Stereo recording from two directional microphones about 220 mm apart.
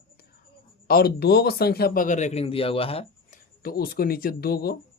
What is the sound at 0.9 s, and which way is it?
Speech, 45° left (ahead or behind).